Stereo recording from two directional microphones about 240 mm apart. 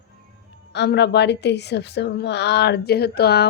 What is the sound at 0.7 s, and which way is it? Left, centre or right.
Speech, left.